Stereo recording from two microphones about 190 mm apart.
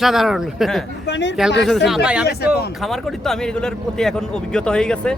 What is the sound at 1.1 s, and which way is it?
Speech, 65° left (ahead or behind).